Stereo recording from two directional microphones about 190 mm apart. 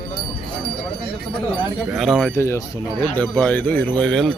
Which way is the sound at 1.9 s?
Centre (ahead or behind).